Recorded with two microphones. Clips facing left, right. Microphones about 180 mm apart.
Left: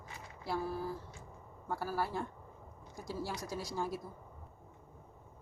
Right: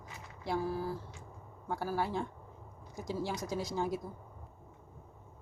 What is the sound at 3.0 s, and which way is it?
A woman's voice, 20° right (ahead or behind).